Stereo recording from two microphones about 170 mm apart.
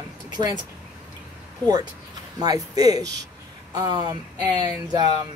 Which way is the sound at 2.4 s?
20° right (ahead or behind).